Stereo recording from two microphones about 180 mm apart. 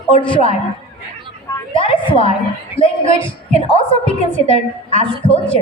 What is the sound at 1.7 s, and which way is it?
A woman's voice, 30° left (ahead or behind).